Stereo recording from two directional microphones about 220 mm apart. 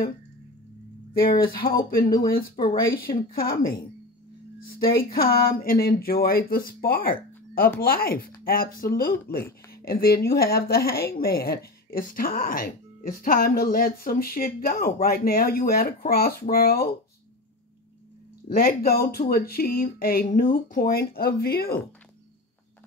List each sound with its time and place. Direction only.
1.2 s a woman's voice: 40° left (ahead or behind)
18.5 s a woman's voice: 45° left (ahead or behind)